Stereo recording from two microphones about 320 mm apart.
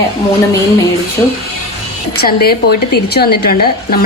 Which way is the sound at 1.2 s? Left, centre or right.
Centre.